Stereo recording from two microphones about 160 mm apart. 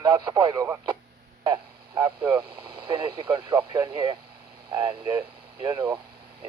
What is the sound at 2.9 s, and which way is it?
Speech, 25° right (ahead or behind).